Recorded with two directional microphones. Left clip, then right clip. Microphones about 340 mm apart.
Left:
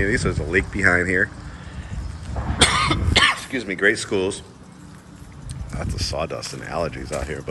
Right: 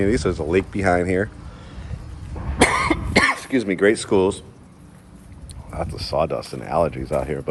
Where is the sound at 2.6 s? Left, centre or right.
Right.